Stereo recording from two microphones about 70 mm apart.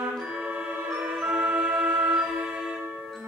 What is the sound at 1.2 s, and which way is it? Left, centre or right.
Music, centre.